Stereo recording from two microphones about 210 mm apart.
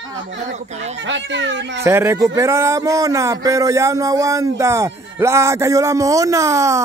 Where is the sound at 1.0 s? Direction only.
60° right (ahead or behind).